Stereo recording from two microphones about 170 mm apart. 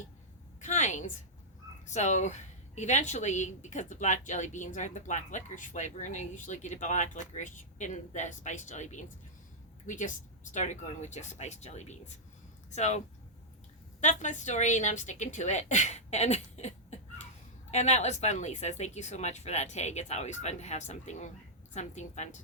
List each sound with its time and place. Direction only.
0.6 s a sound: 45° left (ahead or behind)
1.9 s a woman's voice: 45° left (ahead or behind)
14.0 s a woman's voice: 45° left (ahead or behind)